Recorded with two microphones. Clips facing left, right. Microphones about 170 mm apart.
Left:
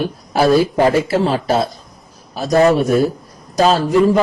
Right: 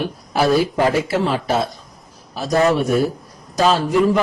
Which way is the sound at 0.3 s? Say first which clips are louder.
Left 3 dB; 40° left (ahead or behind).